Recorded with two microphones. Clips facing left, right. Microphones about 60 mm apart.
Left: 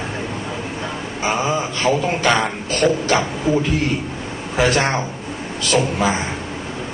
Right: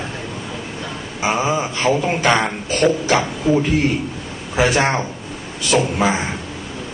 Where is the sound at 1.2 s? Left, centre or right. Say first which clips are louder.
Right 1 dB; centre.